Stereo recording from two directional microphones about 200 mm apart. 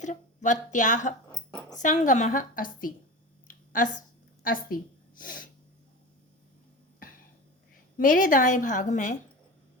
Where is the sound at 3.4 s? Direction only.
40° left (ahead or behind).